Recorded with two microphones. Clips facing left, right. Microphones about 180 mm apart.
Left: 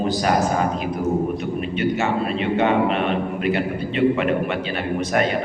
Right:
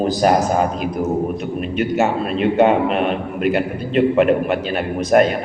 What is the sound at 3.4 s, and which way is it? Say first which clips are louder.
A man's voice: right 3 dB; 45° right (ahead or behind).